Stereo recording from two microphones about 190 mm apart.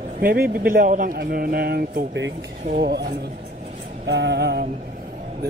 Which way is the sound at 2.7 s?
60° right (ahead or behind).